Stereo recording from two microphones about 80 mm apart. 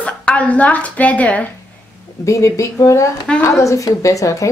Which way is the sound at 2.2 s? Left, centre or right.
Left.